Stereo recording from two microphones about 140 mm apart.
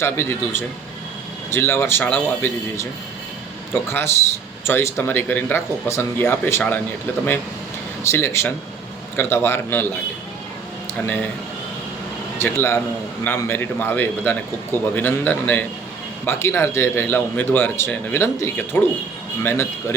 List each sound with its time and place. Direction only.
0.0 s a man's voice: 20° left (ahead or behind)
3.8 s a man's voice: 20° left (ahead or behind)
8.1 s a man's voice: 20° left (ahead or behind)
11.0 s a man's voice: 15° left (ahead or behind)
12.4 s a man's voice: 20° left (ahead or behind)